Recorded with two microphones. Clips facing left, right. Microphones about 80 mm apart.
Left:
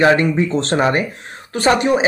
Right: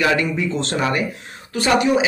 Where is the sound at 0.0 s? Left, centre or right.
Left.